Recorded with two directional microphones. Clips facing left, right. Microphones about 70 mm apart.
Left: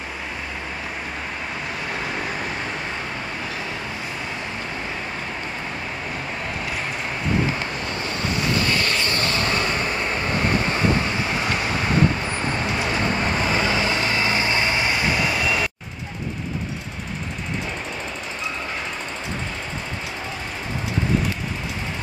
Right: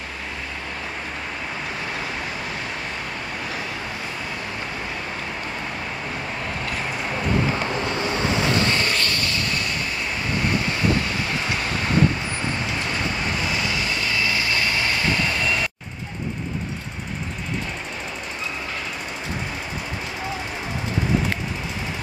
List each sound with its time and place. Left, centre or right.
7.7 s waves: right
9.0 s vehicle: left
13.4 s vehicle: left; by 15.7 s centre